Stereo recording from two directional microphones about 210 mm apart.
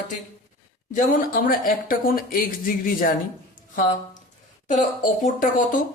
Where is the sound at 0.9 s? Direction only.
45° left (ahead or behind).